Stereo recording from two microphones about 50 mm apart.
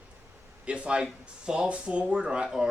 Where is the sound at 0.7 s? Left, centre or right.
Right.